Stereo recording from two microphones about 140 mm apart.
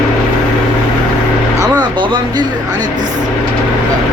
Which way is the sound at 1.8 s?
35° right (ahead or behind).